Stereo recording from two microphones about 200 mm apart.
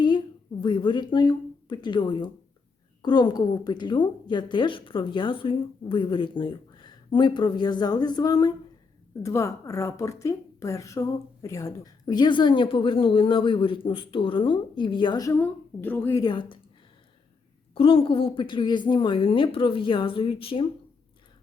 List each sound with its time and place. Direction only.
0.6 s a woman's voice: 25° left (ahead or behind)
17.7 s a woman's voice: 25° left (ahead or behind)